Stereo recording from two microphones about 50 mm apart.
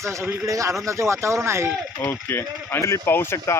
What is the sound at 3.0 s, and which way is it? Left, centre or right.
Speech, left.